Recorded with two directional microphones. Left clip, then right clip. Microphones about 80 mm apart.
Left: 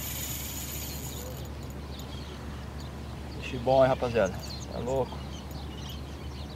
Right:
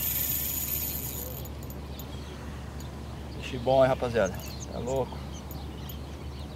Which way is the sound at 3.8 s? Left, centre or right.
Centre.